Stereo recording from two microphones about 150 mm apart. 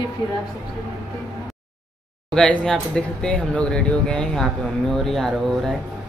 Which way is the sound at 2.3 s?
5° left (ahead or behind).